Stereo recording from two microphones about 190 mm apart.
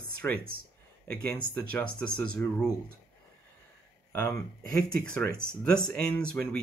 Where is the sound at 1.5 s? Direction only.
5° left (ahead or behind).